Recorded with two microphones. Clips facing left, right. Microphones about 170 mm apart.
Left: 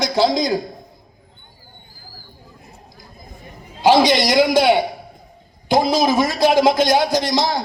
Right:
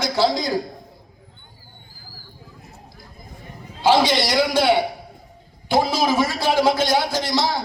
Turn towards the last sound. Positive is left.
turn(degrees=15)  # may be behind; listen again after turning